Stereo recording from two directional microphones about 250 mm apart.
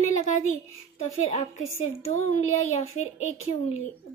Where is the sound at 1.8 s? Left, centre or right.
Left.